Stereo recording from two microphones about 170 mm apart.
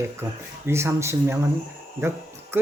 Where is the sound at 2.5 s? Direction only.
15° right (ahead or behind).